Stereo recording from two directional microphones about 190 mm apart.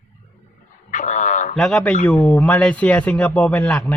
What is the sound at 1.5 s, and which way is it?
A man's voice, 5° left (ahead or behind).